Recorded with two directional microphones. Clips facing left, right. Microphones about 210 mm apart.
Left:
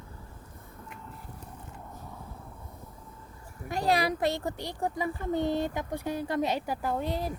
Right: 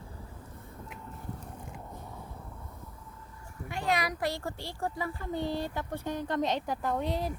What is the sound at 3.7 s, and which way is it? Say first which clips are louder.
Speech: left 4 dB; 35° left (ahead or behind).